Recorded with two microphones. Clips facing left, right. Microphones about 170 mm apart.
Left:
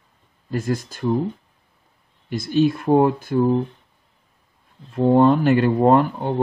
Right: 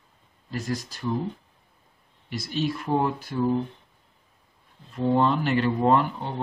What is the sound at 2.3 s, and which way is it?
Speech, 50° left (ahead or behind).